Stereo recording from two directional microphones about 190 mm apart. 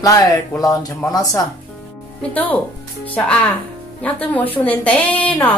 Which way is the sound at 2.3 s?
10° left (ahead or behind).